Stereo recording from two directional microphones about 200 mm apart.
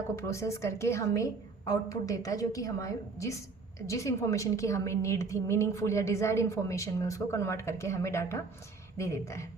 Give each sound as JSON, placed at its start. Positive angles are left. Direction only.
{"t": 0.2, "sound": "a woman's voice", "side_deg": 15}